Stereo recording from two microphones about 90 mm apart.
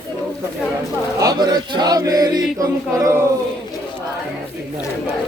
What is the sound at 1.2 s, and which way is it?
Choir, 50° right (ahead or behind).